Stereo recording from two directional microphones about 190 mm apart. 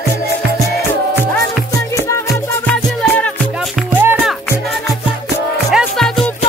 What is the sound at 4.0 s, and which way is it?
Music, 10° right (ahead or behind).